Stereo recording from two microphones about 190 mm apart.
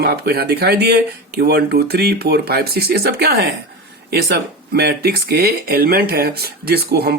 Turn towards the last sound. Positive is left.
turn(degrees=-55)  # may be behind; listen again after turning